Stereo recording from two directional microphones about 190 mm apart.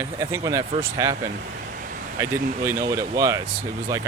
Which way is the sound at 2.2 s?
15° right (ahead or behind).